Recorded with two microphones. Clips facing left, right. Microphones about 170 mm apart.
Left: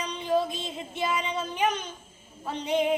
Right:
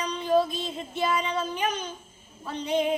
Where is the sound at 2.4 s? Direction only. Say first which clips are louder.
Even; 20° left (ahead or behind).